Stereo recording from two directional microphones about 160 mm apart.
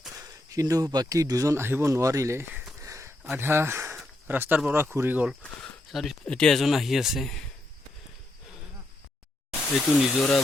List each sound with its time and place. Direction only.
0.2 s speech: 20° right (ahead or behind); by 7.4 s centre (ahead or behind)
10.0 s speech: centre (ahead or behind)